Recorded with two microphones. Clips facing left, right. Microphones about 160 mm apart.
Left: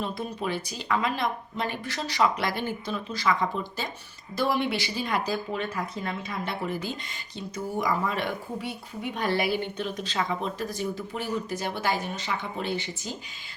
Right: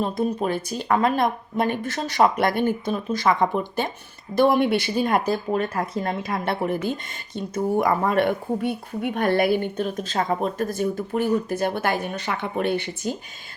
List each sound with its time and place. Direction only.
0.0 s speech: 45° right (ahead or behind)